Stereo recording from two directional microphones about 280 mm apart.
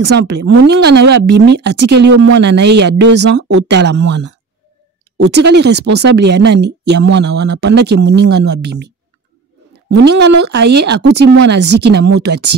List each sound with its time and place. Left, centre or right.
0.6 s speech: right
10.0 s speech: right